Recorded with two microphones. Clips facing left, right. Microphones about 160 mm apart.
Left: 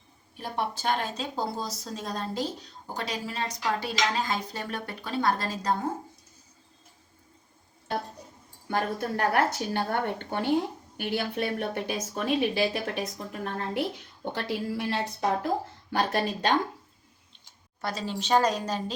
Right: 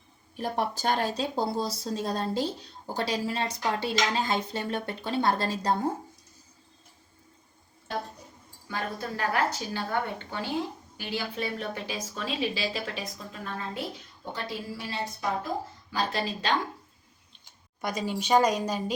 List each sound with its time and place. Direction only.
0.3 s speech: 40° right (ahead or behind)
8.7 s a woman's voice: 60° left (ahead or behind)
15.9 s speech: 55° left (ahead or behind)
17.7 s a woman's voice: 15° right (ahead or behind)